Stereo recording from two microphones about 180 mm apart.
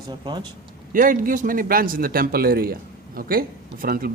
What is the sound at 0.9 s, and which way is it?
Speech, 50° right (ahead or behind).